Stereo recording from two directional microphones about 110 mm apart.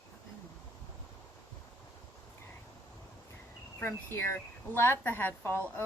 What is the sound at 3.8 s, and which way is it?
A woman's voice, 20° left (ahead or behind).